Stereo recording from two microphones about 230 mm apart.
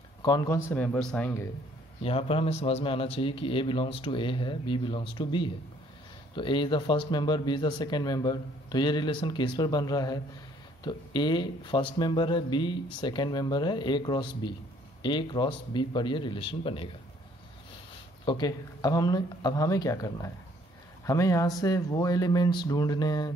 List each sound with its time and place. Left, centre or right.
0.2 s speech: centre
2.0 s speech: left
18.2 s speech: centre